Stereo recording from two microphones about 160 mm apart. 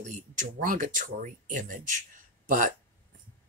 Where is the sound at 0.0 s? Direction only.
55° right (ahead or behind).